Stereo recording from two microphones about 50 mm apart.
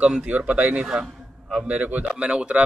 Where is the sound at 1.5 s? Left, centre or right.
Right.